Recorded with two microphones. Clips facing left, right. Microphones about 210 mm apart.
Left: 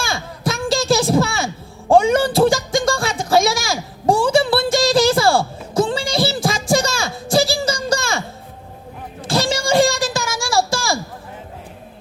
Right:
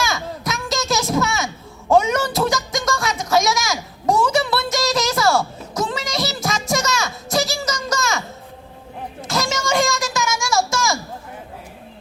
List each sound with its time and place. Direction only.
0.0 s a sound: 30° left (ahead or behind)
1.9 s music: 30° left (ahead or behind)
9.2 s child singing: 30° left (ahead or behind)